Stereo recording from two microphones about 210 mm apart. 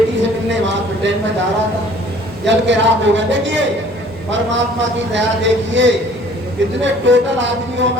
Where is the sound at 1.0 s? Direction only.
60° right (ahead or behind).